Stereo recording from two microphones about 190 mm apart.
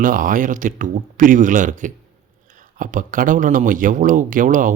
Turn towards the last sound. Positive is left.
turn(degrees=-45)  # may be behind; listen again after turning